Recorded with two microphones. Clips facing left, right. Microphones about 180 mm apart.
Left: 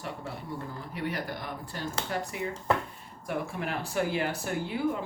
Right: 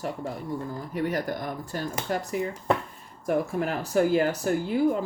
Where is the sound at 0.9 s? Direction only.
45° right (ahead or behind).